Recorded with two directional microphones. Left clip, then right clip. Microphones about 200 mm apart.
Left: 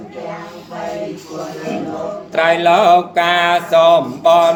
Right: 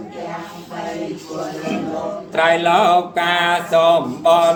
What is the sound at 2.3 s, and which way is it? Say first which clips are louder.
Mantra: left 2 dB; 45° left (ahead or behind).